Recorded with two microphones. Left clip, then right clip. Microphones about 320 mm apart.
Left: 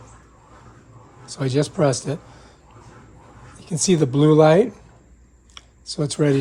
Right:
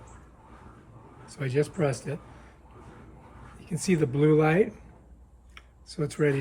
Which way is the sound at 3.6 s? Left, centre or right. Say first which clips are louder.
Left 8 dB; centre.